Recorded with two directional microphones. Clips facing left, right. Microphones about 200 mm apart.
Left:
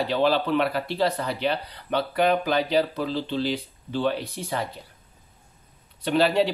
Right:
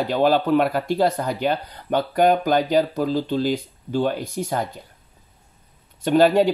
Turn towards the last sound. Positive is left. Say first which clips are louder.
# right 5 dB
turn(degrees=-45)  # may be behind; listen again after turning